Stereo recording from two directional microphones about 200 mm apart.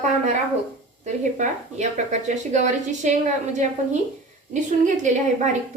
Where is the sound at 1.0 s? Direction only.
35° right (ahead or behind).